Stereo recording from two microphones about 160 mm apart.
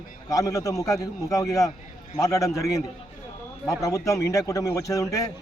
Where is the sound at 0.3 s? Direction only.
20° left (ahead or behind).